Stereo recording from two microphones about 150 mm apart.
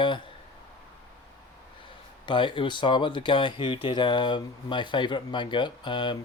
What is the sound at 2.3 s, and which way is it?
Speech, 35° left (ahead or behind).